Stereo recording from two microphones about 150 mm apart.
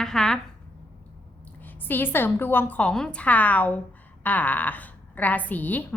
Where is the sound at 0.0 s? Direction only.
5° left (ahead or behind).